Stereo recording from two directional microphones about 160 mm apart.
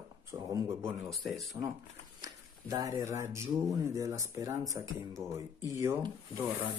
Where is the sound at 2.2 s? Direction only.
20° right (ahead or behind).